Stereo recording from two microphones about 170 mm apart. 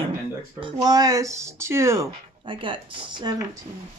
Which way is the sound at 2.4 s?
30° right (ahead or behind).